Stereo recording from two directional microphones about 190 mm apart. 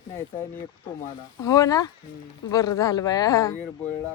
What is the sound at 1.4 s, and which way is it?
Speech, 15° left (ahead or behind).